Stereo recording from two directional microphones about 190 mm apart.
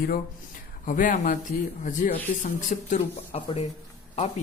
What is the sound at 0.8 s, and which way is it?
Speech, 45° left (ahead or behind).